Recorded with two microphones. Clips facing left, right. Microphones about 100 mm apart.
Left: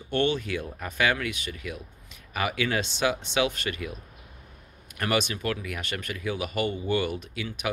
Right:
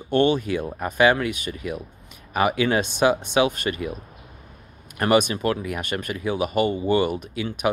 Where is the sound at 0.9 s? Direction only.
25° right (ahead or behind).